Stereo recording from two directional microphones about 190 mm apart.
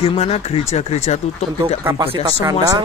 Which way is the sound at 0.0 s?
30° left (ahead or behind).